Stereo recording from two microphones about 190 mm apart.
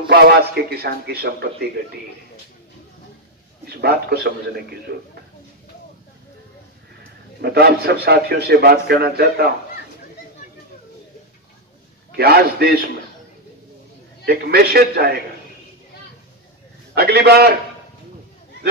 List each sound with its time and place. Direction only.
0.1 s a man's voice: 55° right (ahead or behind)
3.6 s a man's voice: 55° right (ahead or behind)
7.4 s a man's voice: 55° right (ahead or behind)
12.2 s a man's voice: 55° right (ahead or behind)
14.2 s a man's voice: 55° right (ahead or behind)
16.9 s a man's voice: 55° right (ahead or behind)